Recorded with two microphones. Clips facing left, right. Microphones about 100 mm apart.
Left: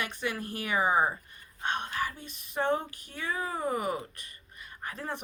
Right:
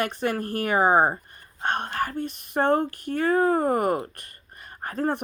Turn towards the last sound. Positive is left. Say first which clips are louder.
# right 11 dB
turn(degrees=-50)  # may be behind; listen again after turning